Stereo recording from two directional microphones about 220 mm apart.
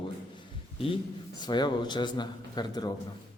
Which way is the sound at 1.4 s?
20° left (ahead or behind).